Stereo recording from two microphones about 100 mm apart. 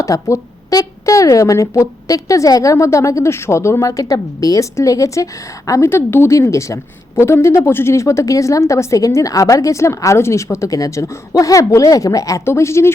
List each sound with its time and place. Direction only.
0.0 s speech: 30° left (ahead or behind)